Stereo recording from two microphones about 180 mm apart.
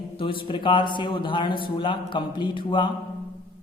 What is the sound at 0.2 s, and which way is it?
A woman's voice, 30° left (ahead or behind).